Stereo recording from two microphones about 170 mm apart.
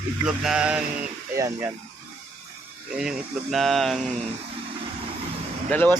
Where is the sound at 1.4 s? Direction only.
20° right (ahead or behind).